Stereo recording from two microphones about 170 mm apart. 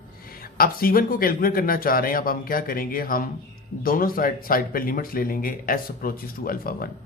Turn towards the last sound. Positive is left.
turn(degrees=60)  # may be behind; listen again after turning